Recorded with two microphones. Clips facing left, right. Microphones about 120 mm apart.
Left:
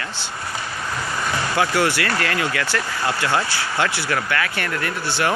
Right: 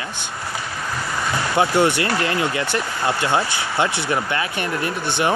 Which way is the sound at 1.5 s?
25° right (ahead or behind).